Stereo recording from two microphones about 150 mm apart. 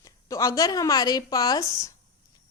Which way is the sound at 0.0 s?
20° left (ahead or behind).